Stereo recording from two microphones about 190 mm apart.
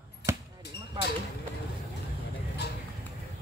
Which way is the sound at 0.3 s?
15° right (ahead or behind).